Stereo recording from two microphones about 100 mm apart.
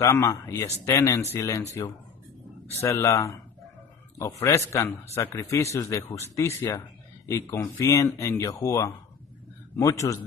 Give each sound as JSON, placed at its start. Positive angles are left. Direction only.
{"t": 0.0, "sound": "speech", "side_deg": 35}
{"t": 2.8, "sound": "speech", "side_deg": 30}